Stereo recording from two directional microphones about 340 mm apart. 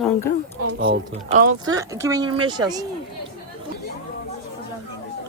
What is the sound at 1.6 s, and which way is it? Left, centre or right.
Speech, centre.